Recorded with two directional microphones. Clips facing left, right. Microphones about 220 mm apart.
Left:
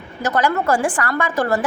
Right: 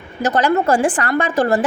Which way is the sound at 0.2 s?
20° right (ahead or behind).